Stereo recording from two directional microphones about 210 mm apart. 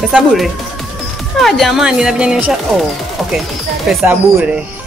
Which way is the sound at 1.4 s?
Centre (ahead or behind).